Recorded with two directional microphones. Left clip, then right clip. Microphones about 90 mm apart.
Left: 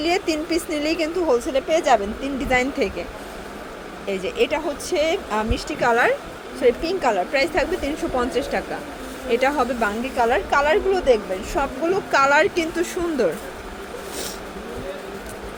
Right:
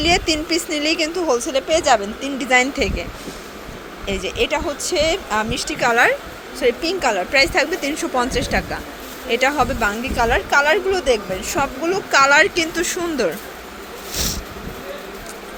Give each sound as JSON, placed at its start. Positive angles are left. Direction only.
{"t": 0.0, "sound": "a woman's voice", "side_deg": -5}
{"t": 4.0, "sound": "a woman's voice", "side_deg": -5}